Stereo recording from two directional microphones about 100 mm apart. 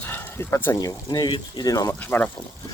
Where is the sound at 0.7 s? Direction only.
40° left (ahead or behind).